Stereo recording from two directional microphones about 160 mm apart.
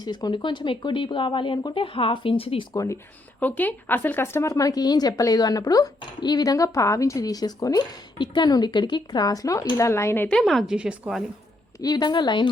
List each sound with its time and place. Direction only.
0.0 s speech: 25° left (ahead or behind)
2.7 s speech: 20° left (ahead or behind); by 11.2 s 5° right (ahead or behind)
11.8 s speech: 25° left (ahead or behind)